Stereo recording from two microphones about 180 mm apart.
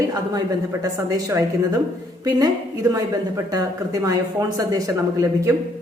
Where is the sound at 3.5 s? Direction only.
20° right (ahead or behind).